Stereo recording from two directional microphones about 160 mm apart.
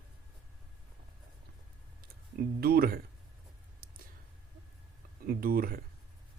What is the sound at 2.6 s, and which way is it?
Speech, 70° right (ahead or behind).